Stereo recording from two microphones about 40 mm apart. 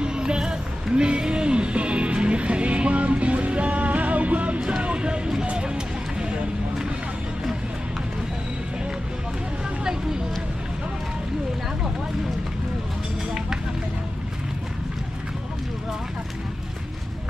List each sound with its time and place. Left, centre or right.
0.0 s music: right